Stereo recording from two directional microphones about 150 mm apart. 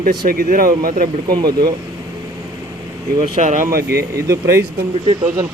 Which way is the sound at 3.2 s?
55° right (ahead or behind).